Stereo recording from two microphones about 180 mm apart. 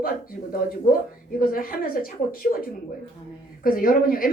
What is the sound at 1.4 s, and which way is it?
Speech, 50° left (ahead or behind).